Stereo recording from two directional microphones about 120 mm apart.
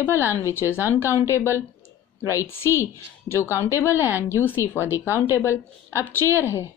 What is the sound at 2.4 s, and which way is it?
A woman's voice, 20° left (ahead or behind).